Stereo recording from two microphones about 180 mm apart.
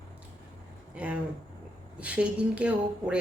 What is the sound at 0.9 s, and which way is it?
A woman's voice, 5° right (ahead or behind).